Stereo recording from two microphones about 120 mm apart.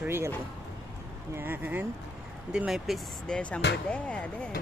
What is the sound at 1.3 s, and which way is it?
Speech, 15° right (ahead or behind).